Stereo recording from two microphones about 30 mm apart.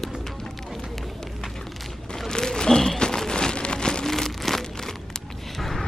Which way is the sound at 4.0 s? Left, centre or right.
Centre.